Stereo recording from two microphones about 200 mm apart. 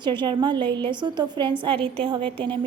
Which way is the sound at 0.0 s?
25° right (ahead or behind).